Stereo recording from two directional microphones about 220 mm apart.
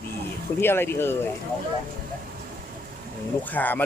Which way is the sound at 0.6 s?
10° left (ahead or behind).